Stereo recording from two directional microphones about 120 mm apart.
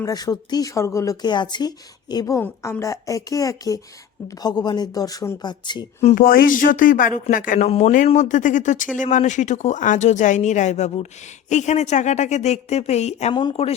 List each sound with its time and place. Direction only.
0.0 s speech: 30° left (ahead or behind)
5.4 s speech: 40° left (ahead or behind)
6.6 s a woman's voice: 90° left; by 13.3 s 70° left (ahead or behind)
13.3 s speech: 50° left (ahead or behind)